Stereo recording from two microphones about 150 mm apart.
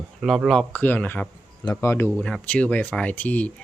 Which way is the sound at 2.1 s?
5° left (ahead or behind).